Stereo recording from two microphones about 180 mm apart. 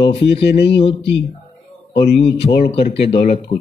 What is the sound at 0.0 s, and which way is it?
A man's voice, 30° left (ahead or behind).